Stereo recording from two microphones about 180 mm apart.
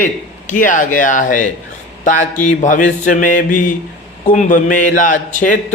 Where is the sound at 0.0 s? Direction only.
45° left (ahead or behind).